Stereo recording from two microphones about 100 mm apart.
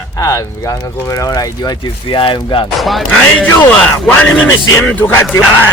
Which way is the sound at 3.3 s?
20° left (ahead or behind).